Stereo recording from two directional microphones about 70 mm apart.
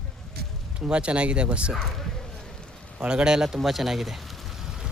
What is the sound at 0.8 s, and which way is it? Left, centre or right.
Speech, centre.